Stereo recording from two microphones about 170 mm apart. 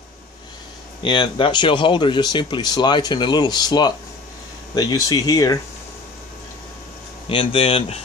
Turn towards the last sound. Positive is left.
turn(degrees=35)  # may be behind; listen again after turning